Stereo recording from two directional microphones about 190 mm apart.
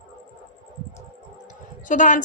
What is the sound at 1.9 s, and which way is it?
Speech, 40° left (ahead or behind).